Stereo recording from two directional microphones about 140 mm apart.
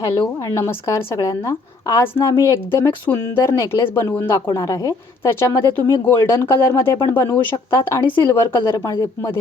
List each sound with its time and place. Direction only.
0.3 s a woman's voice: 20° left (ahead or behind)